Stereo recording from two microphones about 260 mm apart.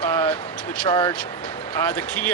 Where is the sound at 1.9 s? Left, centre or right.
Centre.